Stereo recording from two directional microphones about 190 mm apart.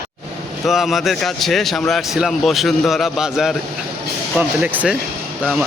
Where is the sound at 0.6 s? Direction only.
Centre (ahead or behind).